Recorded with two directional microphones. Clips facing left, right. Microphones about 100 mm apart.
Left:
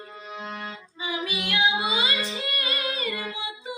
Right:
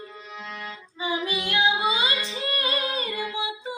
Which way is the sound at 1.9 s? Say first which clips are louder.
Right 1 dB; 30° left (ahead or behind).